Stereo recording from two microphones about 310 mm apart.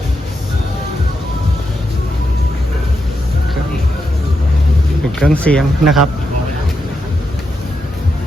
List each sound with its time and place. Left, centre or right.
5.2 s speech: centre